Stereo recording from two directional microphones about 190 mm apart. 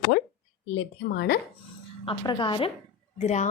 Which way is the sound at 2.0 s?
25° left (ahead or behind).